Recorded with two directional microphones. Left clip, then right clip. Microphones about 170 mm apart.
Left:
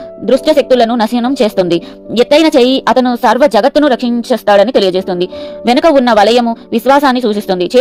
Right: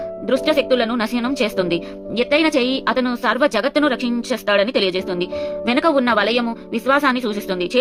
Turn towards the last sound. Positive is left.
turn(degrees=40)  # may be behind; listen again after turning